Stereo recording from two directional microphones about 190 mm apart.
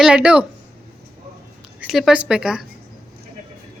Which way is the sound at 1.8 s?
Centre (ahead or behind).